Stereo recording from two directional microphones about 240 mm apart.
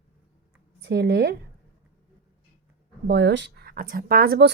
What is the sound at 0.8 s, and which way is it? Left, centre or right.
Speech, right.